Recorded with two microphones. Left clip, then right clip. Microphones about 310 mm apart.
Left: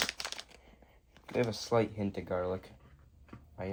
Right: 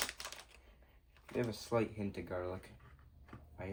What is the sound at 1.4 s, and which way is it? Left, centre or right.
Speech, left.